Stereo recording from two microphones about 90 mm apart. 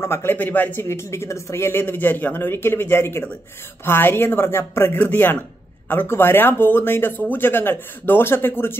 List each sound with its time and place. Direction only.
0.0 s speech: 30° left (ahead or behind)
0.8 s speech: 30° left (ahead or behind)